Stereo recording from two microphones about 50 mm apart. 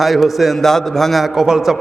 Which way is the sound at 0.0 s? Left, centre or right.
Centre.